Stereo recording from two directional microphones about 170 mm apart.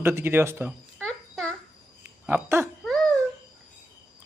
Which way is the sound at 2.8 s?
5° left (ahead or behind).